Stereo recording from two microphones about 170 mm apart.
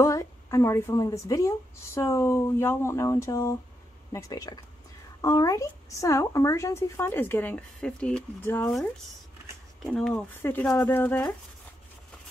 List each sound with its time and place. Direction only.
0.0 s a woman's voice: 20° left (ahead or behind)
9.8 s speech: 5° left (ahead or behind)